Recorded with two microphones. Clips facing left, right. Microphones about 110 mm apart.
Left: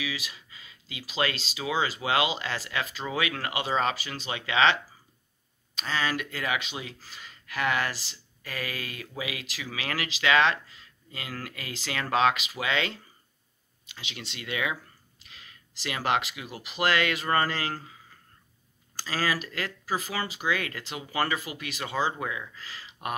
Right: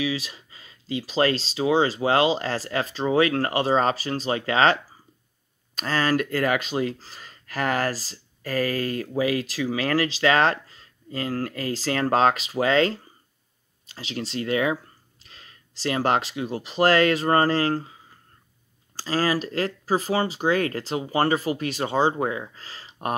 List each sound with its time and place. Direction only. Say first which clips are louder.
0.0 s speech: right 8 dB; 35° right (ahead or behind)
5.8 s speech: right 7 dB; 45° right (ahead or behind)
18.9 s speech: right 6 dB; 35° right (ahead or behind)